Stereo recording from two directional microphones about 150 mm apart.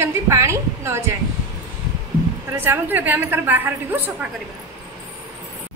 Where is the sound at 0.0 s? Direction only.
20° right (ahead or behind).